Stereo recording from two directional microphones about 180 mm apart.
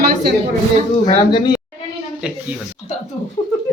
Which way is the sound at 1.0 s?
25° left (ahead or behind).